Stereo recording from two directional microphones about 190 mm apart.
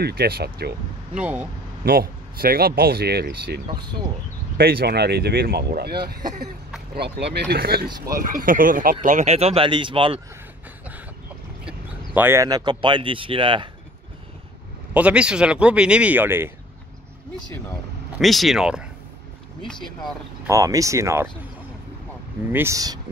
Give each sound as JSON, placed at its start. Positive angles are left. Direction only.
{"t": 0.0, "sound": "speech", "side_deg": -55}
{"t": 1.1, "sound": "speech", "side_deg": -5}
{"t": 1.9, "sound": "speech", "side_deg": -50}
{"t": 11.6, "sound": "speech", "side_deg": -10}
{"t": 15.0, "sound": "speech", "side_deg": -5}
{"t": 18.2, "sound": "speech", "side_deg": 0}
{"t": 20.4, "sound": "speech", "side_deg": -15}
{"t": 22.5, "sound": "speech", "side_deg": -15}